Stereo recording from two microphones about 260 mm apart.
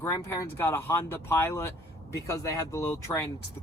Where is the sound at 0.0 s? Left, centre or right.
Centre.